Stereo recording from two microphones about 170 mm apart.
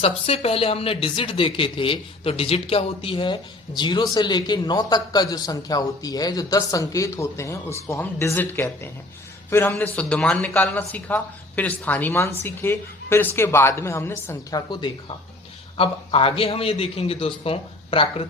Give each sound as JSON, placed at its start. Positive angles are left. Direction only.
{"t": 0.0, "sound": "a man's voice", "side_deg": 35}